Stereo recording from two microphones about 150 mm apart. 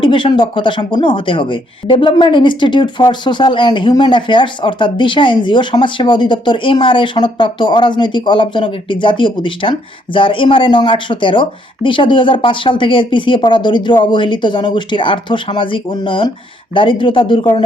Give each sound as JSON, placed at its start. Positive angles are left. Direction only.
{"t": 0.0, "sound": "speech", "side_deg": 35}